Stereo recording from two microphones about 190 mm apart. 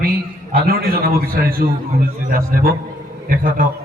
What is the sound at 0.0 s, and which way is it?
A man's voice, 50° right (ahead or behind).